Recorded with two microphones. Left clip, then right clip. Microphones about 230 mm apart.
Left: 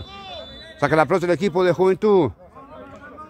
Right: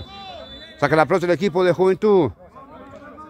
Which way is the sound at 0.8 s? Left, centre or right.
Centre.